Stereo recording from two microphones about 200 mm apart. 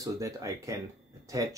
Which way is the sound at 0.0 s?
15° right (ahead or behind).